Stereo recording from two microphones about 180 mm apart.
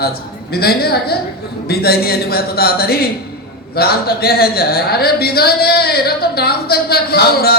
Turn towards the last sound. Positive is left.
turn(degrees=60)  # may be behind; listen again after turning